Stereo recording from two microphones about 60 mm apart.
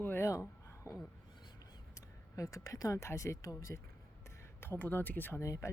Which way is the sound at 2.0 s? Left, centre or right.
Left.